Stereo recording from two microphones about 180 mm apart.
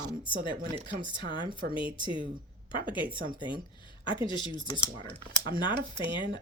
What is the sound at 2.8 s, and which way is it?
A woman's voice, 25° left (ahead or behind).